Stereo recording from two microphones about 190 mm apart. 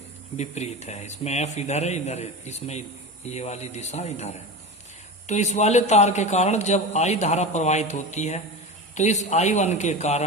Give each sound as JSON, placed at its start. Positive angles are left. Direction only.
{"t": 0.3, "sound": "a man's voice", "side_deg": 35}